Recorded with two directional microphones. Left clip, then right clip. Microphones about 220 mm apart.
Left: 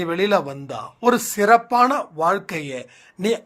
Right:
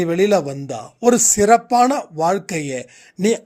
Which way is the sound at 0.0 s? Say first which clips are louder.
Right 3 dB; 55° right (ahead or behind).